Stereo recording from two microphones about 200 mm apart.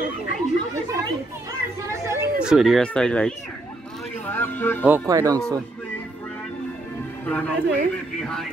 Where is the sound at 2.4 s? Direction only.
5° right (ahead or behind).